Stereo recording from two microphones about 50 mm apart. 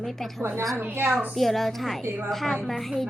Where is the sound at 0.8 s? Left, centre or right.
Right.